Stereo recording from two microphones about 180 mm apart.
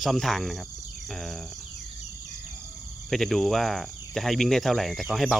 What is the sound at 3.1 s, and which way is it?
Speech, centre (ahead or behind).